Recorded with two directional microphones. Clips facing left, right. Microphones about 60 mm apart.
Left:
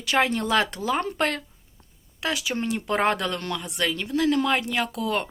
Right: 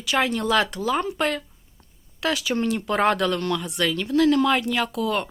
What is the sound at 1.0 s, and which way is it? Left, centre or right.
Speech, left.